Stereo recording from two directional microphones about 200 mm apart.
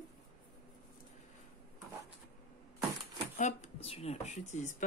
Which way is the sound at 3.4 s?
35° left (ahead or behind).